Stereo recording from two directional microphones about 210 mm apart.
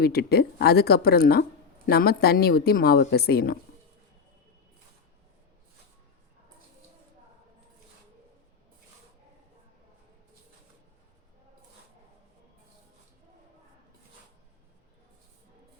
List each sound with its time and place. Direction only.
0.0 s a woman's voice: 50° left (ahead or behind)